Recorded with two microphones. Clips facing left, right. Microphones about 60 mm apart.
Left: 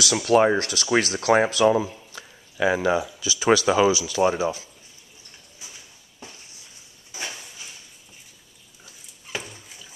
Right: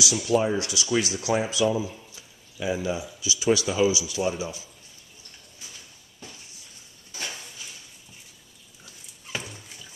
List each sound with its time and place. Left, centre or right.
0.0 s speech: left
2.1 s speech: left
7.1 s a sound: centre
8.8 s dog: centre